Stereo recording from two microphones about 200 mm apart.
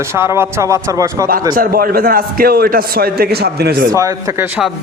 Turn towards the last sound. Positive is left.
turn(degrees=-15)  # may be behind; listen again after turning